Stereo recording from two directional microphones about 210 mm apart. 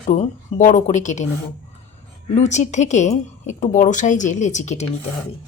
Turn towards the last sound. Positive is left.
turn(degrees=35)  # may be behind; listen again after turning